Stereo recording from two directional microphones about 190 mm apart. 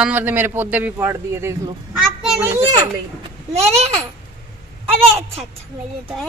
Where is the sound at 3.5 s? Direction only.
35° right (ahead or behind).